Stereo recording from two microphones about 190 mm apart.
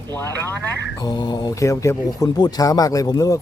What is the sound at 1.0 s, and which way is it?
Speech, 20° left (ahead or behind).